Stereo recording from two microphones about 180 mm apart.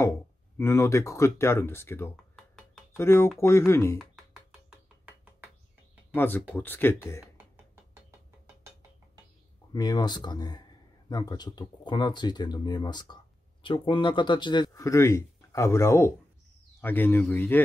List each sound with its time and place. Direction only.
0.6 s speech: 15° left (ahead or behind)
2.3 s a sound: 5° left (ahead or behind)
3.0 s speech: 15° left (ahead or behind)
4.0 s music: 5° right (ahead or behind)
6.1 s speech: 10° left (ahead or behind)
9.7 s speech: 20° left (ahead or behind)